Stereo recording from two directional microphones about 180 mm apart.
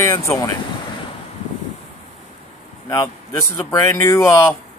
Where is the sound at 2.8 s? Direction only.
20° left (ahead or behind).